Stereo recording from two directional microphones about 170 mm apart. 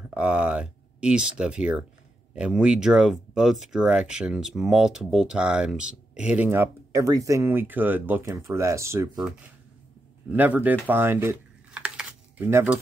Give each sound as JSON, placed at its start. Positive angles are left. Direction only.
{"t": 0.1, "sound": "speech", "side_deg": -5}
{"t": 10.3, "sound": "speech", "side_deg": -10}